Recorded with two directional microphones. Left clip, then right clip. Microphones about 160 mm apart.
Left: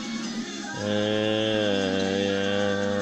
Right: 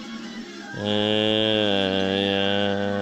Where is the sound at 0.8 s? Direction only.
40° right (ahead or behind).